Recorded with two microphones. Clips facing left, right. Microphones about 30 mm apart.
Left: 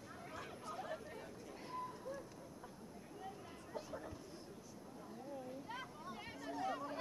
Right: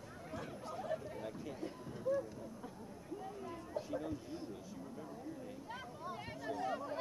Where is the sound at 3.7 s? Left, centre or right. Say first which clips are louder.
Right 5 dB; centre.